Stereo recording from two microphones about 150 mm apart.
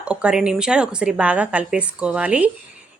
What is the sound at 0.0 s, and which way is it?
Speech, 5° right (ahead or behind).